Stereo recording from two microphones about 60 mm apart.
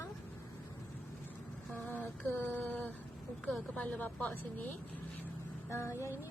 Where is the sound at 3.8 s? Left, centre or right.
Left.